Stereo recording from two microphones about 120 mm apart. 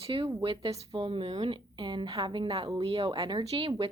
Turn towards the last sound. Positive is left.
turn(degrees=-45)  # may be behind; listen again after turning